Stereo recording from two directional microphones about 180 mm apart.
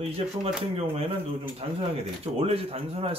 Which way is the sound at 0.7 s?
35° right (ahead or behind).